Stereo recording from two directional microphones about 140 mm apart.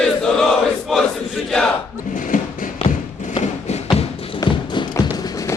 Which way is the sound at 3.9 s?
45° left (ahead or behind).